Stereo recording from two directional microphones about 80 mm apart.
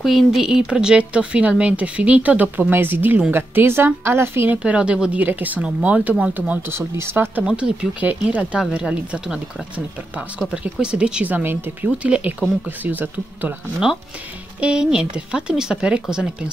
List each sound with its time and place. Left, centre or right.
0.0 s speech: centre; by 4.6 s right
4.6 s speech: centre
6.3 s speech: right
7.4 s speech: centre
14.6 s speech: centre